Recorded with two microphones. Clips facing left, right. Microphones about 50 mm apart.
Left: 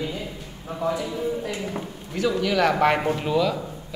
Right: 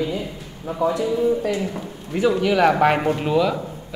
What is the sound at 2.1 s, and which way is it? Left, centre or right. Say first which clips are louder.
Speech: right 4 dB; right.